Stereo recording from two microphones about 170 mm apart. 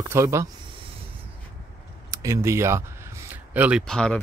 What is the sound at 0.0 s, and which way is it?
Speech, 15° right (ahead or behind).